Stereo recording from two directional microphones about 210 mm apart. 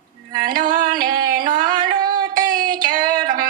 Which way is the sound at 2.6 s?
20° right (ahead or behind).